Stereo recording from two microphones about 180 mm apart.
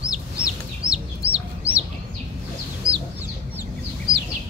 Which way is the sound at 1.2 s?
30° right (ahead or behind).